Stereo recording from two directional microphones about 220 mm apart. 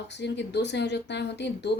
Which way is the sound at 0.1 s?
50° left (ahead or behind).